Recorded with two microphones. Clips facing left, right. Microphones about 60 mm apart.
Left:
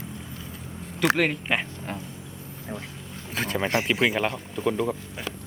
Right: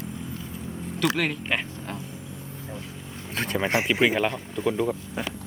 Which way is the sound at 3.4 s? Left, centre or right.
Centre.